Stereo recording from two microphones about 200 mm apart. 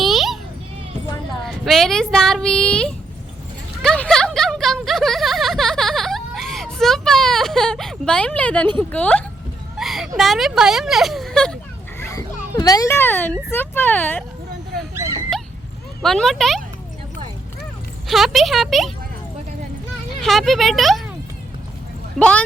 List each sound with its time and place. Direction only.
0.0 s children playing: centre (ahead or behind)
1.5 s speech: centre (ahead or behind)
3.8 s a sound: 5° left (ahead or behind)
8.8 s speech: 5° left (ahead or behind)
9.7 s a sound: centre (ahead or behind)
10.2 s speech: centre (ahead or behind)
11.9 s speech: 15° left (ahead or behind)
14.9 s a sound: 15° right (ahead or behind)
16.0 s speech: centre (ahead or behind)
18.1 s speech: centre (ahead or behind)
20.2 s speech: centre (ahead or behind)
22.2 s speech: 5° left (ahead or behind)